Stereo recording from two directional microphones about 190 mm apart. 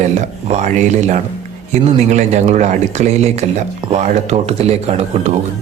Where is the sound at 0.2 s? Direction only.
35° right (ahead or behind).